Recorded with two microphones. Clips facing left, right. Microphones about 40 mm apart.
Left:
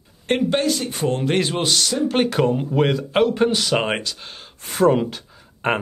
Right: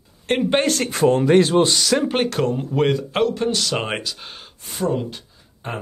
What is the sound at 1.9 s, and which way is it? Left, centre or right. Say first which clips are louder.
Speech: right 6 dB; right.